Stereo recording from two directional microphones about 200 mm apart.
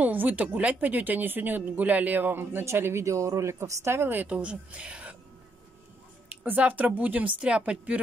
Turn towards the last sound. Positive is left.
turn(degrees=-5)  # may be behind; listen again after turning